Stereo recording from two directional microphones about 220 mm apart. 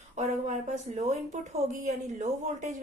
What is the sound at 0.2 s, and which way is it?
Speech, 30° right (ahead or behind).